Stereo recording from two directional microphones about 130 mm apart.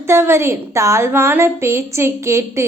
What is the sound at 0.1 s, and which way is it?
A woman's voice, 20° right (ahead or behind).